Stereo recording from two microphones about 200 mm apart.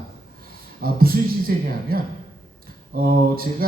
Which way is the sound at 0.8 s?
50° right (ahead or behind).